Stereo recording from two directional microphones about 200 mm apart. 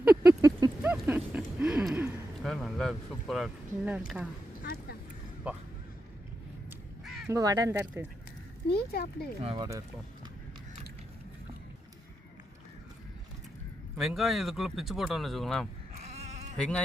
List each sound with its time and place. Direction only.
0.0 s a sound: 15° right (ahead or behind)
2.4 s speech: centre (ahead or behind)
4.6 s vehicle: 50° left (ahead or behind)
5.5 s speech: 5° right (ahead or behind)
7.0 s crow: centre (ahead or behind)
7.3 s speech: 15° right (ahead or behind)
8.7 s speech: 50° left (ahead or behind)
9.4 s speech: 30° right (ahead or behind)
13.9 s speech: 5° right (ahead or behind)